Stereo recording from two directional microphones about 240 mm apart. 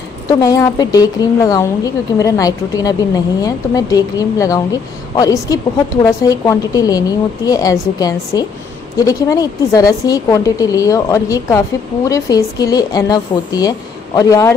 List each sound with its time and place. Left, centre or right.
0.3 s a woman's voice: centre